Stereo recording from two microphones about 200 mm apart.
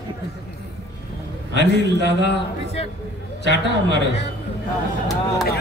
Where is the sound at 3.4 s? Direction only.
60° left (ahead or behind).